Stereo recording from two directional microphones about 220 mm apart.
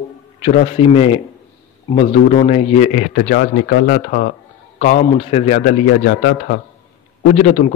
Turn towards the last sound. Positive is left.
turn(degrees=30)  # may be behind; listen again after turning